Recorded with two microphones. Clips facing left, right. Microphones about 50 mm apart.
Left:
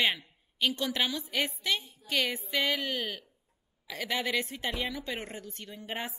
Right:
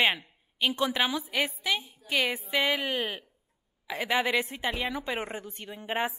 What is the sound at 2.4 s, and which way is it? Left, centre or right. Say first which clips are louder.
A woman's voice: right 3 dB; right.